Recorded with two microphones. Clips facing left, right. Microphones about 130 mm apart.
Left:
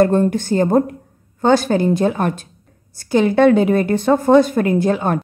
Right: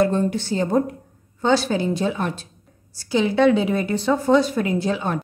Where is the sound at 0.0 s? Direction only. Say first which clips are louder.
Left 5 dB; 50° left (ahead or behind).